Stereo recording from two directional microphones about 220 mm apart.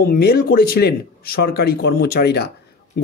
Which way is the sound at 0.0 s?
45° left (ahead or behind).